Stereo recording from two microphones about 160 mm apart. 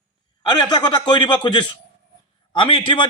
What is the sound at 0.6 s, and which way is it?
A man's voice, 25° left (ahead or behind).